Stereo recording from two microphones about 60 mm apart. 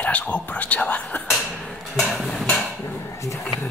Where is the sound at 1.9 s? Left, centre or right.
Centre.